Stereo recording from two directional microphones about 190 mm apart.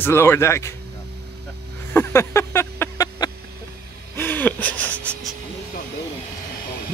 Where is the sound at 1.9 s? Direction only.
10° left (ahead or behind).